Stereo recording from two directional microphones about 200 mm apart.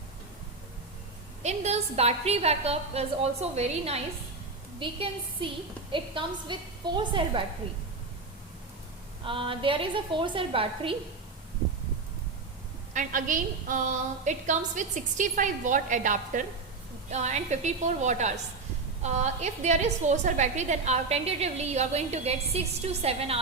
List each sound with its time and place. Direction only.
1.4 s a woman's voice: 35° right (ahead or behind)
9.2 s a woman's voice: 25° right (ahead or behind)
12.9 s a woman's voice: 40° right (ahead or behind)